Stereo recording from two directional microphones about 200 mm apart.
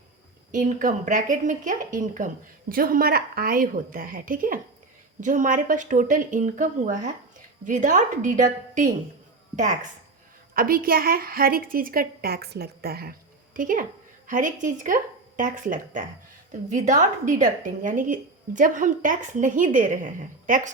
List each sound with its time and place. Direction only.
0.5 s a woman's voice: 40° right (ahead or behind)
10.5 s a woman's voice: 45° right (ahead or behind)